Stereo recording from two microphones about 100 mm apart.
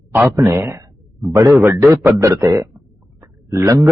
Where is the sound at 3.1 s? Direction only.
30° right (ahead or behind).